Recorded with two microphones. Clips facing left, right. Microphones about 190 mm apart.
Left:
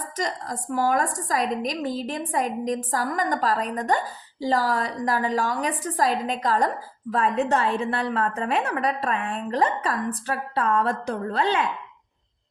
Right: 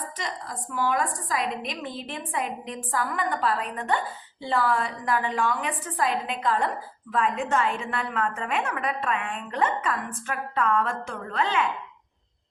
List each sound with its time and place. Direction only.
0.2 s a woman's voice: 45° left (ahead or behind)